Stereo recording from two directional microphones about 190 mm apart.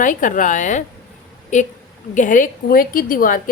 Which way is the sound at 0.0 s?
45° left (ahead or behind).